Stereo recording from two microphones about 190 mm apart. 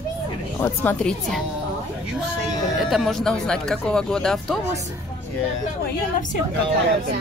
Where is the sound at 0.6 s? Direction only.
10° left (ahead or behind).